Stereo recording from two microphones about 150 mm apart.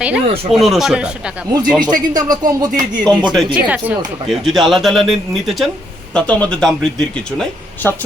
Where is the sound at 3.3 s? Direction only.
10° right (ahead or behind).